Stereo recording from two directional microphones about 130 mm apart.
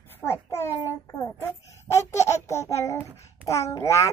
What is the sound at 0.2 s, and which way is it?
Child singing, 20° left (ahead or behind).